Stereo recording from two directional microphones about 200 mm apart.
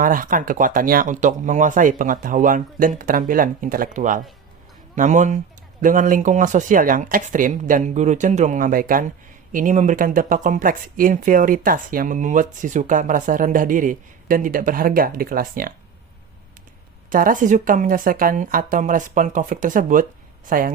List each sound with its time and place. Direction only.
0.0 s speech: 45° right (ahead or behind)
17.1 s speech: 45° right (ahead or behind)